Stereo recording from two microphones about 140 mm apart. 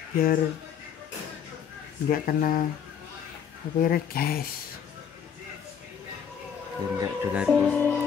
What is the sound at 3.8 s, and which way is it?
Speech, 90° left.